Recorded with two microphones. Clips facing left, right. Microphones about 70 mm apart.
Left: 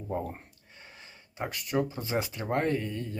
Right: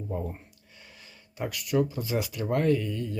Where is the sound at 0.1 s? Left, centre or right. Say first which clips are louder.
Left 1 dB; left.